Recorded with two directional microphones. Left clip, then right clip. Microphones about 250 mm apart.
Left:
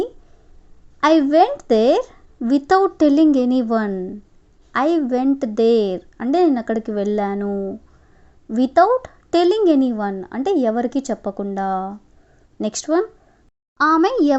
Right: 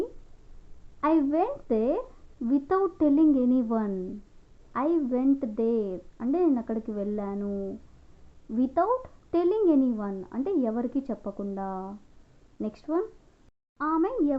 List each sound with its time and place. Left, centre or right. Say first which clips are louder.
0.9 s speech: left 11 dB; left
8.5 s a child's voice: left 11 dB; left